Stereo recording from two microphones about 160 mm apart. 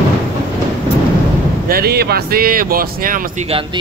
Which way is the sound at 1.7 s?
75° right (ahead or behind).